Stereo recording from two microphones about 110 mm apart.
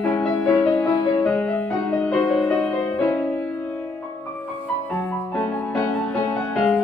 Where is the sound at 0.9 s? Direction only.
35° left (ahead or behind).